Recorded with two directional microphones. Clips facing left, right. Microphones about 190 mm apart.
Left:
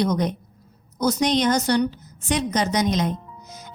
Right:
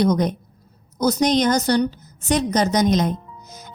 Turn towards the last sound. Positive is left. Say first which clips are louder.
# right 1 dB
turn(degrees=-45)  # may be behind; listen again after turning